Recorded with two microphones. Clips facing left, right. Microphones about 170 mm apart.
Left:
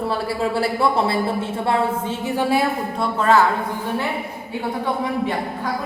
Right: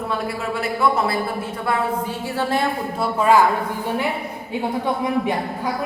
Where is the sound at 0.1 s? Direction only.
30° left (ahead or behind); by 2.6 s 10° left (ahead or behind).